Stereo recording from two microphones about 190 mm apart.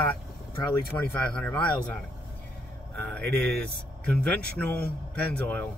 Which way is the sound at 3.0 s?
5° left (ahead or behind).